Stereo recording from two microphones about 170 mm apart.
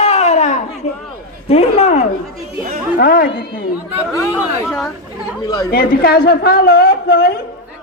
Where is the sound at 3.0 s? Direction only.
60° left (ahead or behind).